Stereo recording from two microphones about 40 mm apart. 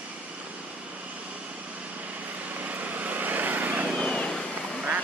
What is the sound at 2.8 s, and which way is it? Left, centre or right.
Vehicle, right.